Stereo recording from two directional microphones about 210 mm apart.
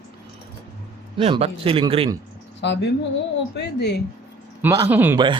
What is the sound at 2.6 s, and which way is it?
A woman's voice, 55° left (ahead or behind).